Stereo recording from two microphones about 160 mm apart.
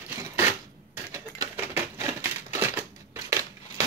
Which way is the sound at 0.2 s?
15° right (ahead or behind).